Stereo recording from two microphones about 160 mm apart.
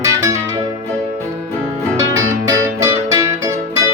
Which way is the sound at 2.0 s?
20° right (ahead or behind).